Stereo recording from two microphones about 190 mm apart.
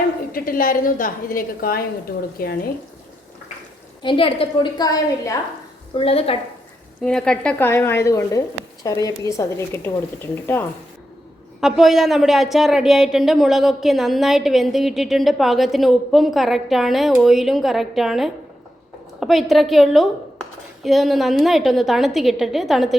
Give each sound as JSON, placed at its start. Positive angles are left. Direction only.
{"t": 0.3, "sound": "a woman's voice", "side_deg": 50}
{"t": 4.0, "sound": "a woman's voice", "side_deg": 25}
{"t": 5.9, "sound": "a woman's voice", "side_deg": 30}
{"t": 7.0, "sound": "a woman's voice", "side_deg": 5}
{"t": 11.6, "sound": "a woman's voice", "side_deg": 0}